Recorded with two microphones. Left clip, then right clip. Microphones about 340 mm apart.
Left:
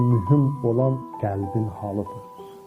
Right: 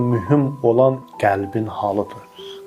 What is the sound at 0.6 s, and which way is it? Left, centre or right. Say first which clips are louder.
Speech: right 10 dB; right.